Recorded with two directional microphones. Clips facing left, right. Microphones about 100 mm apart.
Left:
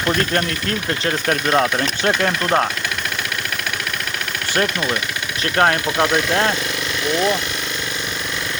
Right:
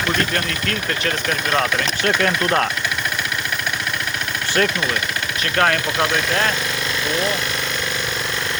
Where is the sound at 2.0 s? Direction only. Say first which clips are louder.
Even; 20° left (ahead or behind).